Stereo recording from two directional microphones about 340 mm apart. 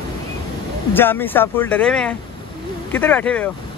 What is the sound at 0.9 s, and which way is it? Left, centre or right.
Speech, centre.